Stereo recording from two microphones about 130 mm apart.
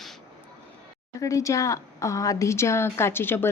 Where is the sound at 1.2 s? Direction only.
25° left (ahead or behind).